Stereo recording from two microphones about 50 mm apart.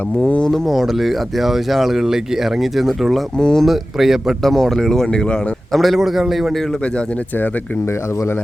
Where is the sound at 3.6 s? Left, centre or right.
Centre.